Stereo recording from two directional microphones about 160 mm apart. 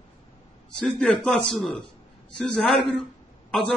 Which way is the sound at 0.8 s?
5° left (ahead or behind).